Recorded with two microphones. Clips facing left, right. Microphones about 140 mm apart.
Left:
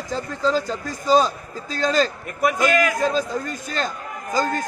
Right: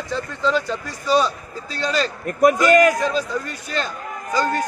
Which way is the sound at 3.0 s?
45° left (ahead or behind).